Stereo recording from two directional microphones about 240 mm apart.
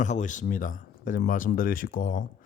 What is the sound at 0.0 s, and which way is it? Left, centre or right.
A man's voice, left.